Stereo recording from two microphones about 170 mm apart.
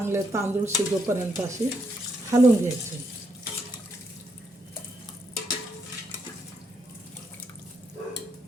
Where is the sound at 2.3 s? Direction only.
15° right (ahead or behind).